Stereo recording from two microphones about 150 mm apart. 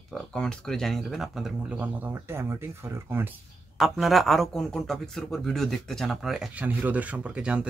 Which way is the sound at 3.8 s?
Centre (ahead or behind).